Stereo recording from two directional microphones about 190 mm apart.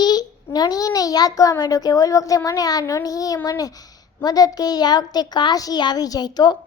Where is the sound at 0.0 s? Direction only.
20° left (ahead or behind).